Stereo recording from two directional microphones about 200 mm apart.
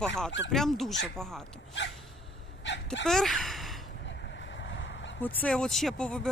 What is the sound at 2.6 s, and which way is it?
Speech, 65° left (ahead or behind).